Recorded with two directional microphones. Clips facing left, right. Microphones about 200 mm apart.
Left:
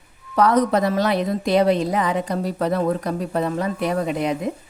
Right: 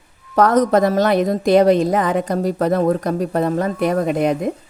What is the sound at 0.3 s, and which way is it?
A woman's voice, 45° right (ahead or behind).